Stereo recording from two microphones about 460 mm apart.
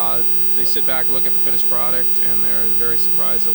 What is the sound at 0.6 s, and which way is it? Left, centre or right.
Speech, right.